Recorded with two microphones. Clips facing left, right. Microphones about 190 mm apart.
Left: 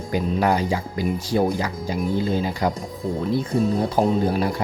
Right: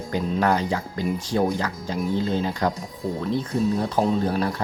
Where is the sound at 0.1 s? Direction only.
10° left (ahead or behind).